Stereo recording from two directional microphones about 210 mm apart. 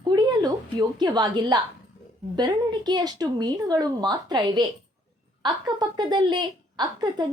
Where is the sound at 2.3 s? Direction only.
20° right (ahead or behind).